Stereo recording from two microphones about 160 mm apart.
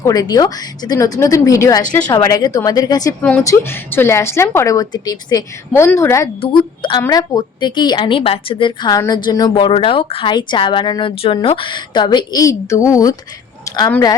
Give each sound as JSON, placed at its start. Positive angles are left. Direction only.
{"t": 0.0, "sound": "a woman's voice", "side_deg": 25}
{"t": 3.2, "sound": "a woman's voice", "side_deg": 10}
{"t": 6.4, "sound": "a woman's voice", "side_deg": 30}